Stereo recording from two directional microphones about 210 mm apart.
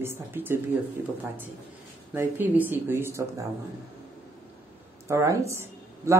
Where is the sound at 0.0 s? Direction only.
10° right (ahead or behind).